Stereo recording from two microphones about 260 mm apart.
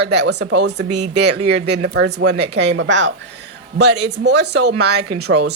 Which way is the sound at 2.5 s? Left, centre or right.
Right.